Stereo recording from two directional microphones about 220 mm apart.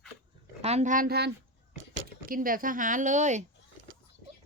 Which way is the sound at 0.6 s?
30° right (ahead or behind).